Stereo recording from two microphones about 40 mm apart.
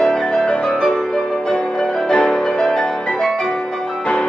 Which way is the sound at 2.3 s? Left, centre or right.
Centre.